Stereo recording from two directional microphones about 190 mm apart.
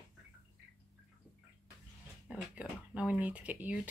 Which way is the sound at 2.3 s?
5° right (ahead or behind).